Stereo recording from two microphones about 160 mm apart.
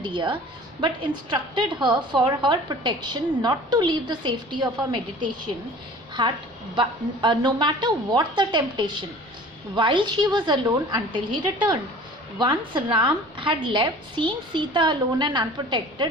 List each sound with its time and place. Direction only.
0.0 s a woman's voice: 30° right (ahead or behind)
6.2 s a woman's voice: 30° right (ahead or behind)